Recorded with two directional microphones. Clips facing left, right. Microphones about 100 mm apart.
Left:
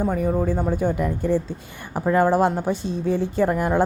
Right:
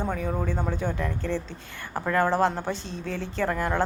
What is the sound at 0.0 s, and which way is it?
A woman's voice, 10° left (ahead or behind).